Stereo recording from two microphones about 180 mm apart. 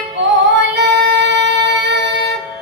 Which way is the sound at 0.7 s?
70° right (ahead or behind).